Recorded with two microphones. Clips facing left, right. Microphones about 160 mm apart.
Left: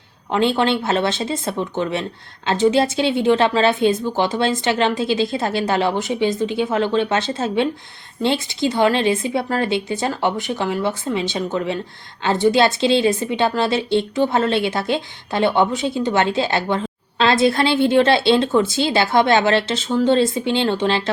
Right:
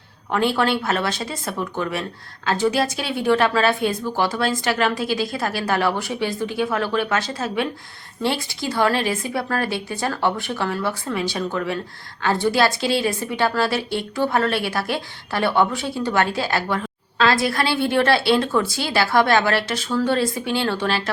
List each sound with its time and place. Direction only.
0.3 s a woman's voice: 20° left (ahead or behind)